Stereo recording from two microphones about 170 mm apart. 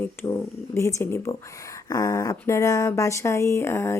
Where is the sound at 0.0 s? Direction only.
15° left (ahead or behind).